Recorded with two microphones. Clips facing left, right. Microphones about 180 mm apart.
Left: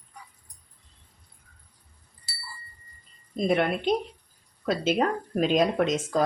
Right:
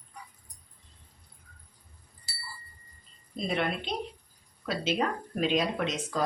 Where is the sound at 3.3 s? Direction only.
50° left (ahead or behind).